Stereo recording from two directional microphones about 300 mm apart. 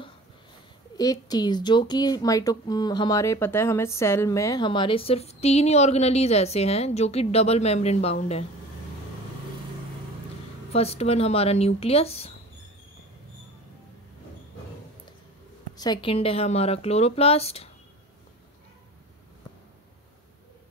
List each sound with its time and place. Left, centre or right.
0.9 s speech: centre
10.7 s speech: centre
15.8 s speech: centre